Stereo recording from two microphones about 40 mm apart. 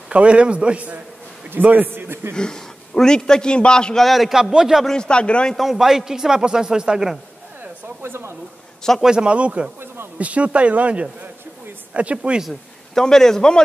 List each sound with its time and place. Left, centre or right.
0.1 s a man's voice: right
1.6 s a man's voice: right
1.9 s a man's voice: right
2.3 s a man's voice: centre
3.9 s a man's voice: centre
4.3 s speech: centre
4.9 s a man's voice: left
5.8 s speech: centre
8.0 s speech: right
9.0 s a man's voice: right
12.9 s a man's voice: centre